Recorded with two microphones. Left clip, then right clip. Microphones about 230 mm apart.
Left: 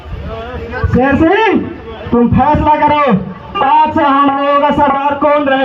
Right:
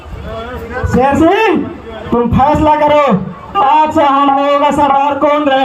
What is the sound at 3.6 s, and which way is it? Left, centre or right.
Music, right.